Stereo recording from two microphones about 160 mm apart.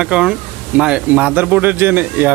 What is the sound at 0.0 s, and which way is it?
Speech, 5° right (ahead or behind).